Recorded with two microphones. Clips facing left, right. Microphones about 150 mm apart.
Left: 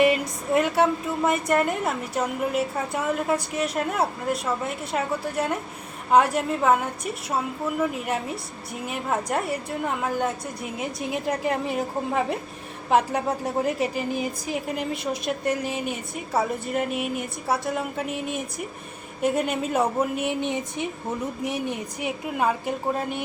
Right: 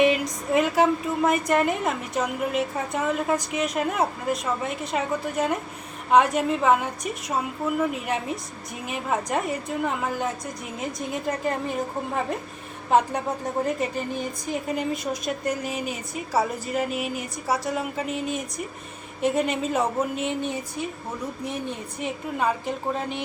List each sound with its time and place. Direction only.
0.0 s speech: centre (ahead or behind)
20.2 s a woman's voice: 20° left (ahead or behind)